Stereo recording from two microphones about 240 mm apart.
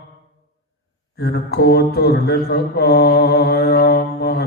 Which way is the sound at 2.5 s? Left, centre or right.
Left.